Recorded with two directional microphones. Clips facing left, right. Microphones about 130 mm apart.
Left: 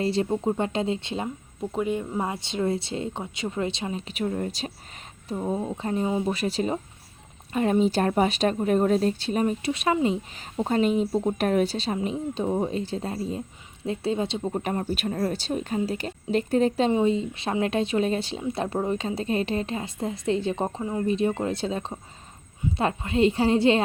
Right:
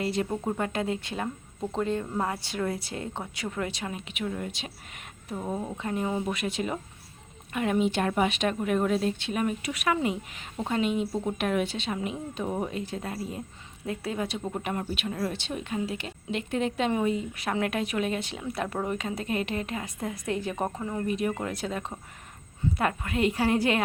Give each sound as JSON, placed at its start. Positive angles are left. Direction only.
{"t": 0.0, "sound": "speech", "side_deg": 30}
{"t": 1.7, "sound": "speech", "side_deg": 10}
{"t": 5.3, "sound": "speech", "side_deg": 25}
{"t": 6.3, "sound": "speech", "side_deg": 35}
{"t": 10.6, "sound": "speech", "side_deg": 40}
{"t": 14.5, "sound": "speech", "side_deg": 35}